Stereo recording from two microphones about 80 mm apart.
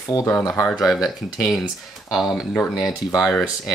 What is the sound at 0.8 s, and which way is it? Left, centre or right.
Speech, centre.